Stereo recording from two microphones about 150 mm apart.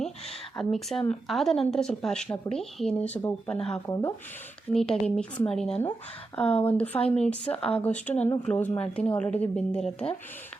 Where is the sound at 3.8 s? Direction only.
20° left (ahead or behind).